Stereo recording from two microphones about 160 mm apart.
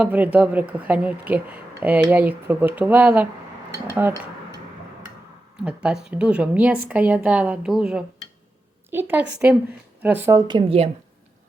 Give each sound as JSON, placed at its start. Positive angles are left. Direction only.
{"t": 0.0, "sound": "a woman's voice", "side_deg": -10}
{"t": 5.5, "sound": "a woman's voice", "side_deg": -5}